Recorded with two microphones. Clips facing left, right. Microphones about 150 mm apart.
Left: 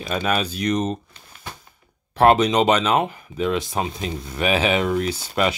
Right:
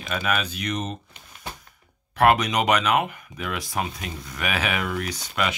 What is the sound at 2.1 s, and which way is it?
Speech, 25° left (ahead or behind).